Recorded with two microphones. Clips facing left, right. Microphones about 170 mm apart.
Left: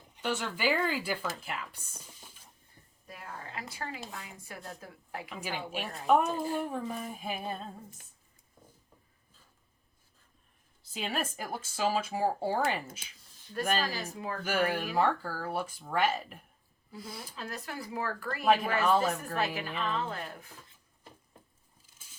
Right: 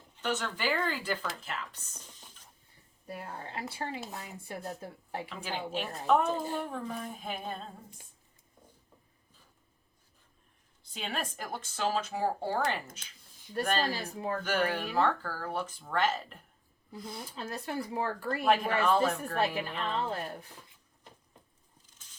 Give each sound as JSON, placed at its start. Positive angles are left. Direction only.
{"t": 0.2, "sound": "speech", "side_deg": 10}
{"t": 3.1, "sound": "a woman's voice", "side_deg": -30}
{"t": 5.3, "sound": "speech", "side_deg": 10}
{"t": 10.9, "sound": "speech", "side_deg": 5}
{"t": 14.0, "sound": "speech", "side_deg": -30}
{"t": 14.4, "sound": "speech", "side_deg": 10}
{"t": 17.3, "sound": "speech", "side_deg": -30}
{"t": 18.4, "sound": "speech", "side_deg": 5}
{"t": 20.0, "sound": "a woman's voice", "side_deg": -30}
{"t": 21.8, "sound": "a sound", "side_deg": 10}